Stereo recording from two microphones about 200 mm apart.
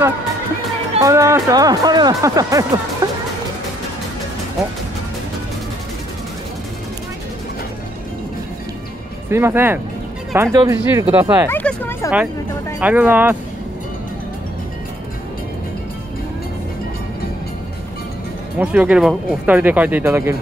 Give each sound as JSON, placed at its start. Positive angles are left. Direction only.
{"t": 1.0, "sound": "speech", "side_deg": -15}
{"t": 3.0, "sound": "music", "side_deg": -20}
{"t": 9.3, "sound": "speech", "side_deg": -10}
{"t": 11.4, "sound": "hubbub", "side_deg": 10}
{"t": 12.8, "sound": "speech", "side_deg": -10}
{"t": 18.6, "sound": "speech", "side_deg": -5}